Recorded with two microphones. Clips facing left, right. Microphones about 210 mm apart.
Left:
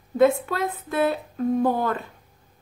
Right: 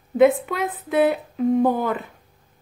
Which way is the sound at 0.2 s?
20° right (ahead or behind).